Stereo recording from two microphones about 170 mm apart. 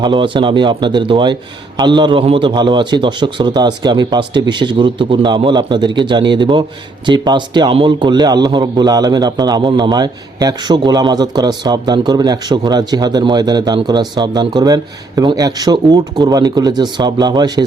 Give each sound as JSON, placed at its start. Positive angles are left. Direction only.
{"t": 0.0, "sound": "a man's voice", "side_deg": -25}